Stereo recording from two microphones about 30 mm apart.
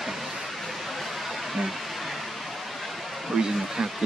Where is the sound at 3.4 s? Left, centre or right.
Centre.